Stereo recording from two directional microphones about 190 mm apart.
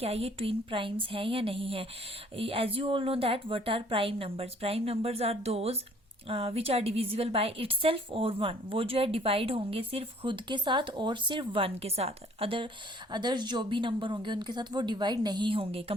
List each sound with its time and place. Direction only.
0.0 s a woman's voice: 30° right (ahead or behind)